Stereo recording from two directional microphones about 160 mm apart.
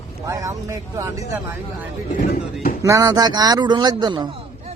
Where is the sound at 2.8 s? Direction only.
20° right (ahead or behind).